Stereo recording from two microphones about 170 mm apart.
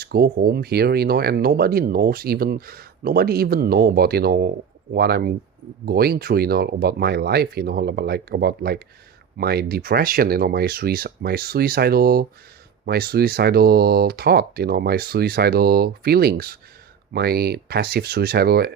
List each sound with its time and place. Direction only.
0.0 s speech: 65° right (ahead or behind)